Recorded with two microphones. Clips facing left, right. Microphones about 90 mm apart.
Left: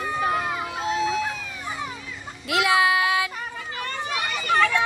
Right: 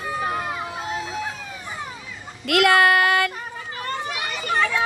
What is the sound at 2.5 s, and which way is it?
Speech, 60° right (ahead or behind).